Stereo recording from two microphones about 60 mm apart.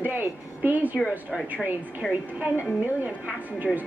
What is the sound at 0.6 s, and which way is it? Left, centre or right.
Speech, right.